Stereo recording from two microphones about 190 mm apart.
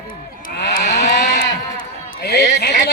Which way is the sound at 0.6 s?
60° left (ahead or behind).